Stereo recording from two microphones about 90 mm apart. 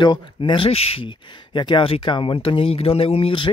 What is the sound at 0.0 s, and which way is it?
Speech, 65° left (ahead or behind).